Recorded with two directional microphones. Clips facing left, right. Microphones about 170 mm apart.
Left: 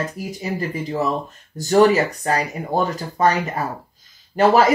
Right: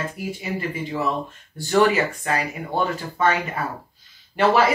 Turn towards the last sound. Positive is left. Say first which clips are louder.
# left 3 dB
turn(degrees=40)  # may be behind; listen again after turning